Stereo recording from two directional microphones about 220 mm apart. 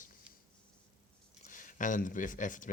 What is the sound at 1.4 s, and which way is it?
Speech, 35° left (ahead or behind).